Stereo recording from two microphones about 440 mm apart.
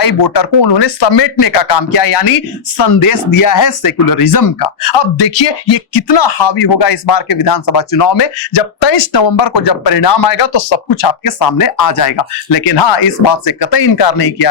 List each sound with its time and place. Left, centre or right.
0.0 s speech: left
2.7 s speech: left
3.4 s speech: left
4.9 s speech: left
10.4 s speech: left
11.2 s speech: left
12.7 s speech: left